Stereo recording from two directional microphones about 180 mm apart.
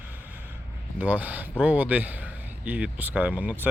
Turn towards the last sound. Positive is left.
turn(degrees=-10)  # may be behind; listen again after turning